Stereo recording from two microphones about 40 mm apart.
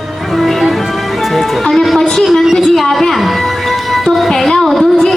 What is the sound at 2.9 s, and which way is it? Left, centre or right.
Music, centre.